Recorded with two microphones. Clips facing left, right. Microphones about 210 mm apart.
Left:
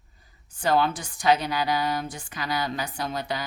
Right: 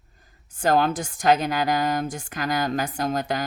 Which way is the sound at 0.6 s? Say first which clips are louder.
Right 3 dB; 45° right (ahead or behind).